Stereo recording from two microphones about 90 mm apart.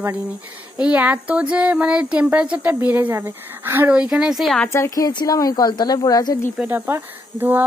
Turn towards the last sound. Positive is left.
turn(degrees=-20)  # may be behind; listen again after turning